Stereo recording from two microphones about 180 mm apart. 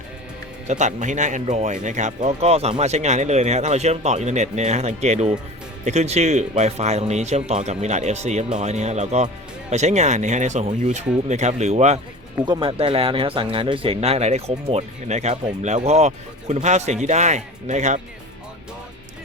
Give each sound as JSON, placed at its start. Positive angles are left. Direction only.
{"t": 0.7, "sound": "speech", "side_deg": -40}